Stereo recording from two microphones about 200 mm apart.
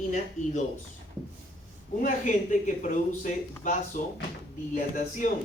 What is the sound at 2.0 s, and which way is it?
Speech, 40° left (ahead or behind).